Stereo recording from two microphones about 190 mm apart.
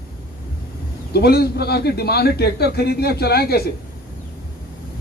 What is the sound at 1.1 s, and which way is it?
A man's voice, 55° left (ahead or behind).